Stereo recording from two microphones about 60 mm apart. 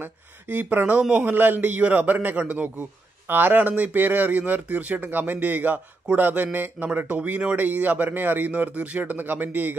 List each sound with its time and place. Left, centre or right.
0.0 s a man's voice: right